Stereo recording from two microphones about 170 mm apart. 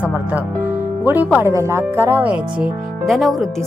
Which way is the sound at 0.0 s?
10° right (ahead or behind).